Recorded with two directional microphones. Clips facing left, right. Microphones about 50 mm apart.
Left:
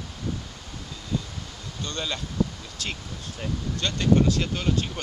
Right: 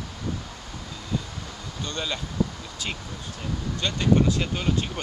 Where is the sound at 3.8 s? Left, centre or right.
Centre.